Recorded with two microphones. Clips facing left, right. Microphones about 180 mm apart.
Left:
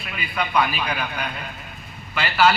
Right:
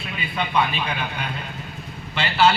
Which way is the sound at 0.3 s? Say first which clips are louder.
Left 1 dB; 25° right (ahead or behind).